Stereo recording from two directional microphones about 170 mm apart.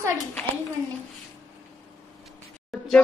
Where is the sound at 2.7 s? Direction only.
Centre (ahead or behind).